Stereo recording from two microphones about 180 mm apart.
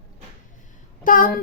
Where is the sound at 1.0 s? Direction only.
50° left (ahead or behind).